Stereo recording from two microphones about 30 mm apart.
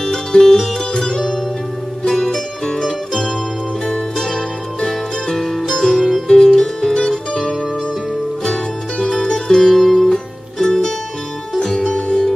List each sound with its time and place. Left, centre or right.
0.0 s music: centre
3.8 s music: centre
8.5 s music: centre
11.9 s music: left